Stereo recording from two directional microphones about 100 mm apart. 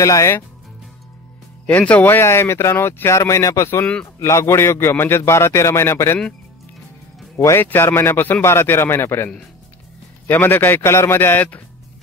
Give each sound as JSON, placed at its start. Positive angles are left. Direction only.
{"t": 0.0, "sound": "speech", "side_deg": 30}
{"t": 1.7, "sound": "speech", "side_deg": 15}
{"t": 3.8, "sound": "speech", "side_deg": 10}
{"t": 4.2, "sound": "speech", "side_deg": 30}
{"t": 7.3, "sound": "speech", "side_deg": 25}